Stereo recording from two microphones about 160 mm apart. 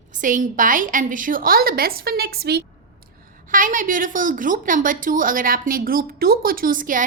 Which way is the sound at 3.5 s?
55° right (ahead or behind).